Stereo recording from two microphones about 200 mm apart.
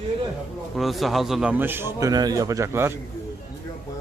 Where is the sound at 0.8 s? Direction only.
Centre (ahead or behind).